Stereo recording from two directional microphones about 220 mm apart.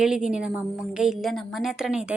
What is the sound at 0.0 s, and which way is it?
A woman's voice, 5° right (ahead or behind).